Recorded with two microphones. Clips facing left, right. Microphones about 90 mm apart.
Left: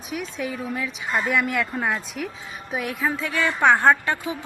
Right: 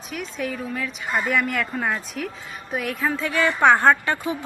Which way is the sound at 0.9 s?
Centre (ahead or behind).